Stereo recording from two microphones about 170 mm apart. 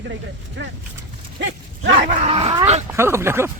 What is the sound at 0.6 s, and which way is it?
Speech, 90° right.